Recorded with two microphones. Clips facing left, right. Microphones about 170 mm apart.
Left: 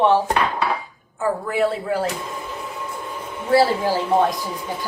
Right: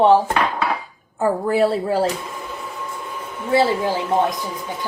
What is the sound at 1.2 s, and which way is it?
Speech, 35° right (ahead or behind).